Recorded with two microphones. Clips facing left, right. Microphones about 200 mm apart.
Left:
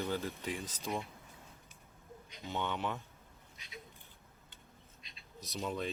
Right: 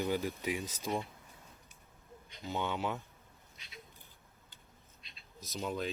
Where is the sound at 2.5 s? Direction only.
10° right (ahead or behind).